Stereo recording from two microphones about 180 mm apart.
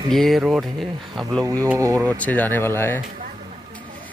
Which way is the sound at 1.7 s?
15° right (ahead or behind).